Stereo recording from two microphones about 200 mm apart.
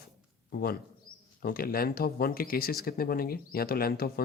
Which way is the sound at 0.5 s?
50° left (ahead or behind).